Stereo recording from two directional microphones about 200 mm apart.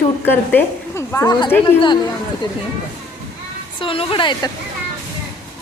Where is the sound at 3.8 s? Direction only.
25° left (ahead or behind).